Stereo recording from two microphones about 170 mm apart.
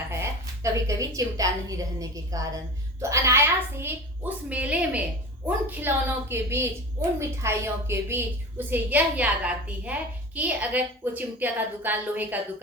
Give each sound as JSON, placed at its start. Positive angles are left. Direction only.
{"t": 0.1, "sound": "a woman's voice", "side_deg": -15}